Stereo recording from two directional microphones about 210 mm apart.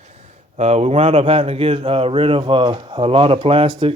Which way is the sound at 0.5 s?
30° right (ahead or behind).